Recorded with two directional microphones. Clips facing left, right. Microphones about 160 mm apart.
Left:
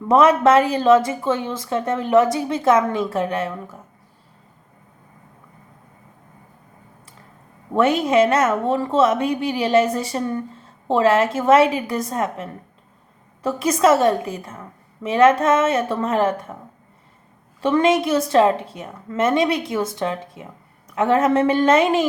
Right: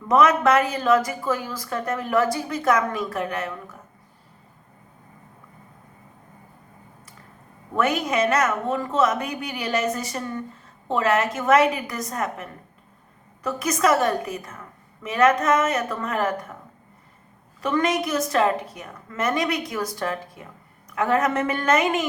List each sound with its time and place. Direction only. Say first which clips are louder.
0.1 s speech: left 4 dB; 30° left (ahead or behind)
7.7 s speech: left 6 dB; 25° left (ahead or behind)
17.6 s speech: left 6 dB; 30° left (ahead or behind)